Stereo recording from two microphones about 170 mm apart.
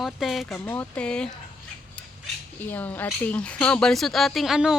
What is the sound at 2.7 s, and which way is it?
Speech, 10° left (ahead or behind).